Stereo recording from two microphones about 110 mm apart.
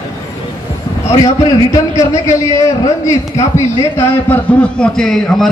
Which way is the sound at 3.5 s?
25° left (ahead or behind).